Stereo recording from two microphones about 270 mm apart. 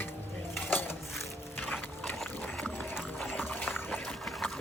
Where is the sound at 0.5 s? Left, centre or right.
Centre.